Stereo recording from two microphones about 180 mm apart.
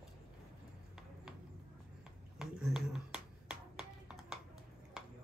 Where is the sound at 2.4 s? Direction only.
Centre (ahead or behind).